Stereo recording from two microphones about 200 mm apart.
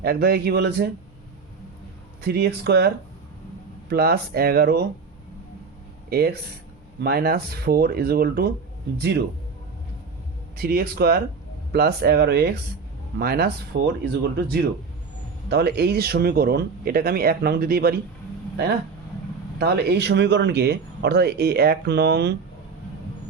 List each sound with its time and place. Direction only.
0.0 s speech: 50° right (ahead or behind)
2.2 s speech: 55° right (ahead or behind)
6.1 s speech: 50° right (ahead or behind)
10.6 s speech: 50° right (ahead or behind)
19.5 s speech: 55° right (ahead or behind)